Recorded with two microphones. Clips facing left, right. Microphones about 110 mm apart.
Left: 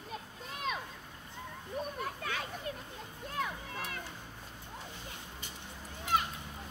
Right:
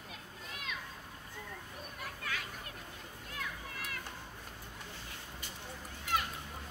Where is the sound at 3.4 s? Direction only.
25° left (ahead or behind).